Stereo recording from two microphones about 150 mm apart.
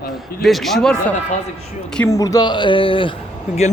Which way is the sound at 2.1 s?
25° left (ahead or behind).